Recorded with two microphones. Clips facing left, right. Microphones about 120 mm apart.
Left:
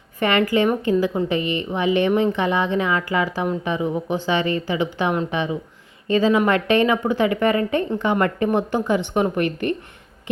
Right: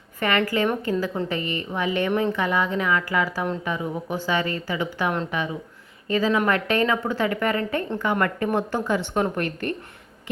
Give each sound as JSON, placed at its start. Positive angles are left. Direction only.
{"t": 0.2, "sound": "a woman's voice", "side_deg": 20}